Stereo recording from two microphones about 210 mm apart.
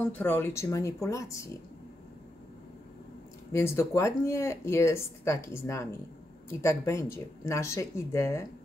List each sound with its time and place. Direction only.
0.0 s speech: 10° left (ahead or behind)
3.5 s speech: 15° left (ahead or behind)